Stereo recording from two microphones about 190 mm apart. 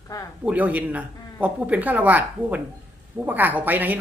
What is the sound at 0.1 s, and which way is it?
Speech, 20° left (ahead or behind).